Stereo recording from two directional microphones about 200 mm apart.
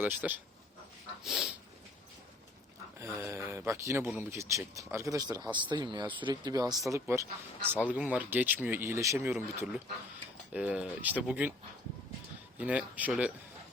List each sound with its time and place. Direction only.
0.0 s speech: 10° right (ahead or behind)
1.2 s snort: centre (ahead or behind)
3.0 s speech: 10° right (ahead or behind)
12.5 s speech: 5° right (ahead or behind)